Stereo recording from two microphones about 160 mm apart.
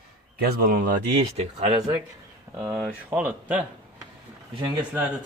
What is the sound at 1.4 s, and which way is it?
Speech, 40° right (ahead or behind).